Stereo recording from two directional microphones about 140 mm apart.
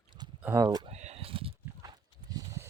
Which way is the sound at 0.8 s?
50° right (ahead or behind).